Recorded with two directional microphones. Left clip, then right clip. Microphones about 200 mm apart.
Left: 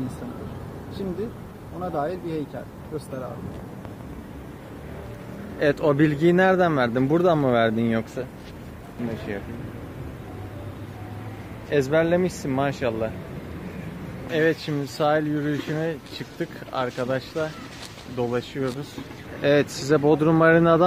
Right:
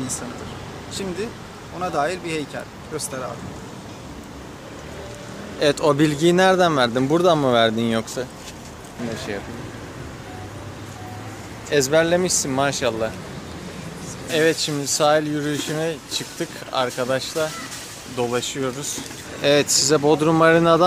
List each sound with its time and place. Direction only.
1.8 s speech: 25° right (ahead or behind)
5.6 s speech: 15° right (ahead or behind)
11.7 s speech: 5° right (ahead or behind)
14.3 s speech: 5° right (ahead or behind)